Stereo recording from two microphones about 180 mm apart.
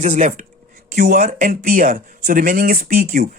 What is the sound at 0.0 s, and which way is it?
Speech, 45° right (ahead or behind).